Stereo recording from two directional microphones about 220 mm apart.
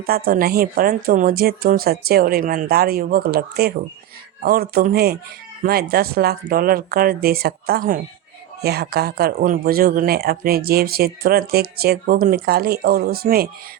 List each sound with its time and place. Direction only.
0.0 s speech: 40° right (ahead or behind)